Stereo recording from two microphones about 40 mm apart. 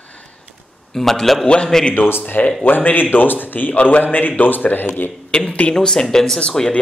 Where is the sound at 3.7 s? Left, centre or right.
Left.